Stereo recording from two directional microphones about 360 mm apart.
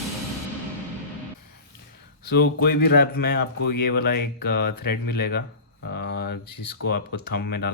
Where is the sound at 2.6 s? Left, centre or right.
Left.